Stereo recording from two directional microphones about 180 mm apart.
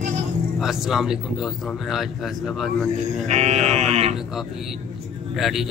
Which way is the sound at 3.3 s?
40° right (ahead or behind).